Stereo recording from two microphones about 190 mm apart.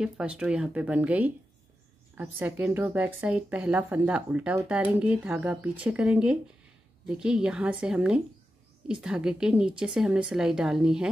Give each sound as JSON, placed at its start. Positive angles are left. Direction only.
{"t": 0.0, "sound": "a woman's voice", "side_deg": -5}